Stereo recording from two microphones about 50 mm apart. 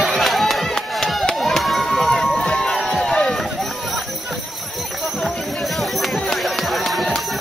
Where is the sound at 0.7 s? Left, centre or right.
Centre.